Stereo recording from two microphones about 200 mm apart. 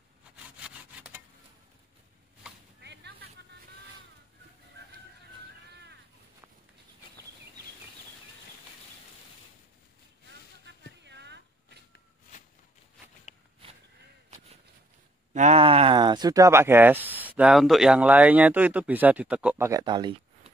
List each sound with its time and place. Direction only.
2.8 s vehicle: 60° right (ahead or behind)
11.1 s a sound: 60° right (ahead or behind)
15.3 s speech: 35° right (ahead or behind); by 19.7 s 5° right (ahead or behind)
19.7 s speech: 20° right (ahead or behind)